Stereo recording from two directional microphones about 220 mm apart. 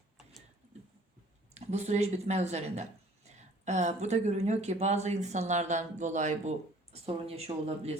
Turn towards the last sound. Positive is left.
turn(degrees=-30)  # may be behind; listen again after turning